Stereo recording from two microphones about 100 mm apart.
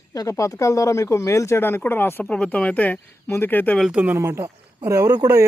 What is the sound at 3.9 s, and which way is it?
Speech, 15° right (ahead or behind).